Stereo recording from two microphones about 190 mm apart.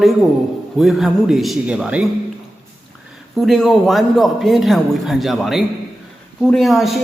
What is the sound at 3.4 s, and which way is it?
Speech, centre (ahead or behind).